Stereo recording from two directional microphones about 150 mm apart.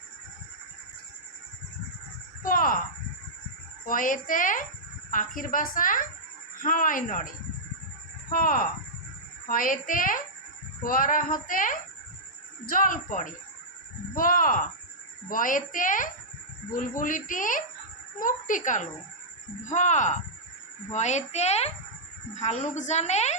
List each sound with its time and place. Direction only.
2.4 s a sound: 70° left (ahead or behind)
3.8 s speech: 65° left (ahead or behind)
8.3 s a woman's voice: 70° left (ahead or behind); by 23.3 s 50° left (ahead or behind)